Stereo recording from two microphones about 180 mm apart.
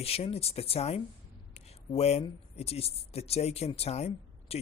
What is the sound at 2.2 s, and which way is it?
Speech, 35° left (ahead or behind).